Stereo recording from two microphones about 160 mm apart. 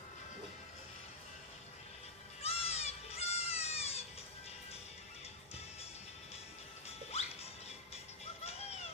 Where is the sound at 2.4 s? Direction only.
40° left (ahead or behind).